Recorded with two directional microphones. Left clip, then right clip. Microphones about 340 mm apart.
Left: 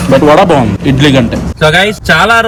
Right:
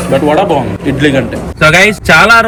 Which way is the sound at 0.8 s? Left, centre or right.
Centre.